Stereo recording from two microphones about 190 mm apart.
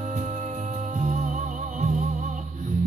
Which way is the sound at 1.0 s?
40° right (ahead or behind).